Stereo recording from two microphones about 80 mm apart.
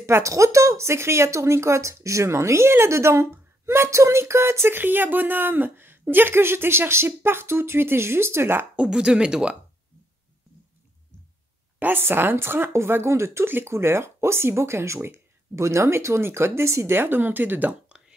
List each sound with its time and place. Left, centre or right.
0.0 s speech: right
8.7 s speech: centre
11.8 s speech: right